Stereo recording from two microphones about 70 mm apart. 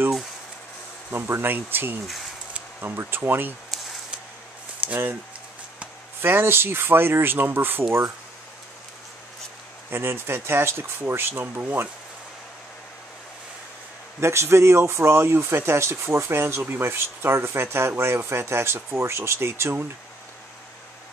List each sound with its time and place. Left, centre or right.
1.1 s speech: right
4.8 s speech: right
6.2 s speech: right
9.8 s speech: right
14.2 s speech: right